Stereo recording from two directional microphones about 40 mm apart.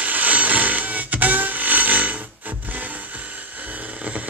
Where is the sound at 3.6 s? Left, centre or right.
Right.